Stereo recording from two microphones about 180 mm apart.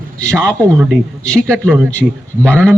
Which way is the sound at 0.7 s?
Centre (ahead or behind).